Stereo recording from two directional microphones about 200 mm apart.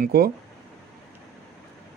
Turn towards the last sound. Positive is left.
turn(degrees=-50)  # may be behind; listen again after turning